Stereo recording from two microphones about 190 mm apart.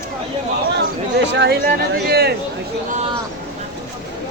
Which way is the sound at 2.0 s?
55° right (ahead or behind).